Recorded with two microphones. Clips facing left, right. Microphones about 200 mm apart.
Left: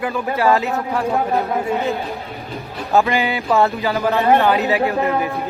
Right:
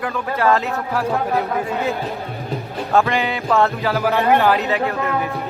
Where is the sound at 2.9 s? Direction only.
5° left (ahead or behind).